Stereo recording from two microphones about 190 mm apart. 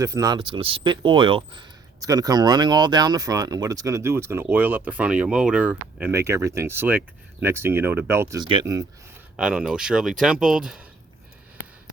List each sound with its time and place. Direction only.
0.0 s speech: 20° right (ahead or behind)
9.3 s speech: 5° right (ahead or behind)